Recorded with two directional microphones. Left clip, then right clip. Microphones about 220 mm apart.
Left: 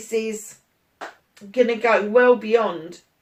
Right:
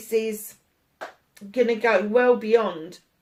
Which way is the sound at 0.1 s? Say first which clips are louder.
Even; 40° right (ahead or behind).